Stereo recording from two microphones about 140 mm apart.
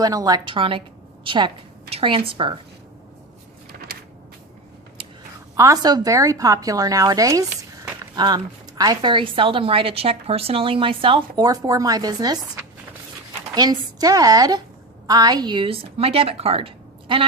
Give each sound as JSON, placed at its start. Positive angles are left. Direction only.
{"t": 0.0, "sound": "a woman's voice", "side_deg": -25}
{"t": 5.0, "sound": "a sound", "side_deg": -40}
{"t": 5.5, "sound": "a woman's voice", "side_deg": -25}
{"t": 11.4, "sound": "a woman's voice", "side_deg": -25}
{"t": 13.5, "sound": "a woman's voice", "side_deg": -30}